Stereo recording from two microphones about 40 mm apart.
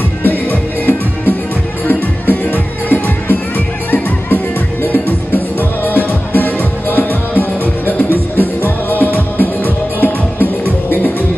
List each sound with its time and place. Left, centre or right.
0.2 s music: left